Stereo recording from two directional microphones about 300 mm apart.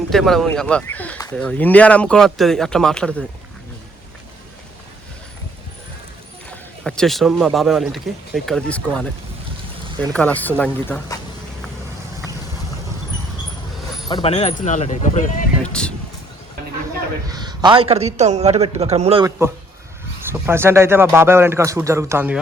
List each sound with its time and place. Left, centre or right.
0.1 s speech: centre
6.8 s speech: centre
14.1 s speech: centre
15.6 s a sound: centre
17.2 s a man's voice: centre